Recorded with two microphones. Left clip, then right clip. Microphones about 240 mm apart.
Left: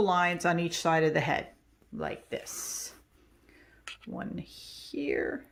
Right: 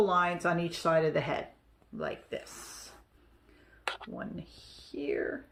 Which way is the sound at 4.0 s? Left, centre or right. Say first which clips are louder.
Left 2 dB; left.